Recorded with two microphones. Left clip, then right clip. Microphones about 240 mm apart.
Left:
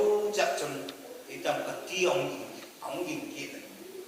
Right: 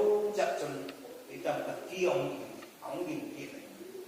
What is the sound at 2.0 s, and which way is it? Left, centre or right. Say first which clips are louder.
A man's voice: left 1 dB; right.